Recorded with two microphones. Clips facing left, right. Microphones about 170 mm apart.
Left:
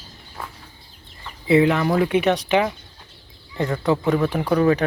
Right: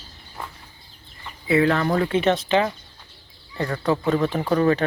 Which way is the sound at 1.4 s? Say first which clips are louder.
Left 3 dB; 25° left (ahead or behind).